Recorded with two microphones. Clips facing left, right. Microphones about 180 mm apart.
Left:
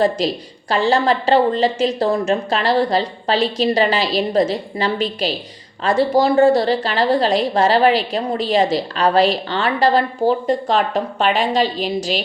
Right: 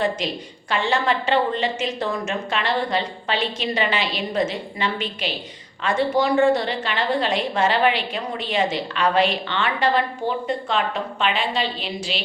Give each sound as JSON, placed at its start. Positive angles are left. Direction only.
{"t": 0.2, "sound": "a woman's voice", "side_deg": 35}